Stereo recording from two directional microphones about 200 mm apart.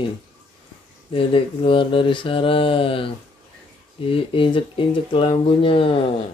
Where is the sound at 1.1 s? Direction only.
25° left (ahead or behind).